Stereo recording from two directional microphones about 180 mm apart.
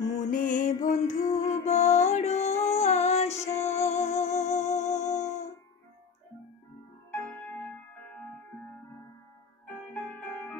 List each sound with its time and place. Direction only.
0.1 s music: 45° left (ahead or behind)
7.1 s music: 10° left (ahead or behind)
9.9 s music: 10° left (ahead or behind)